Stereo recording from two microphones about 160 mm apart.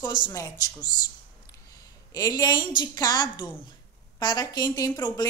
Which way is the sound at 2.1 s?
25° left (ahead or behind).